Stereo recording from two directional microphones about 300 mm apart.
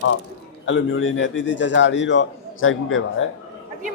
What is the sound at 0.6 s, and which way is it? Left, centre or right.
A man's voice, left.